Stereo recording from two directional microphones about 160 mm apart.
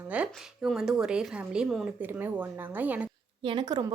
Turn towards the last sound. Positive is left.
turn(degrees=-30)  # may be behind; listen again after turning